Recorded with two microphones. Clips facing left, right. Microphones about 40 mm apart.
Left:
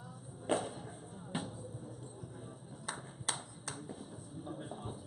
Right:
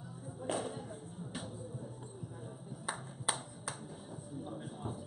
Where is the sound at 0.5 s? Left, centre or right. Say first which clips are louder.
Left 3 dB; left.